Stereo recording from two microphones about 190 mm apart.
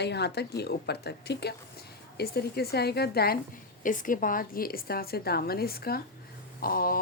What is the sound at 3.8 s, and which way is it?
Speech, 45° left (ahead or behind).